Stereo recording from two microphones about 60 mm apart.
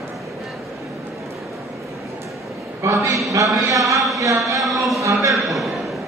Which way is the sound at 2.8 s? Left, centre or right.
Right.